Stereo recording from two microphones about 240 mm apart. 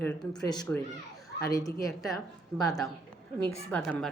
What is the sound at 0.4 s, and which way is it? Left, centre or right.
A woman's voice, centre.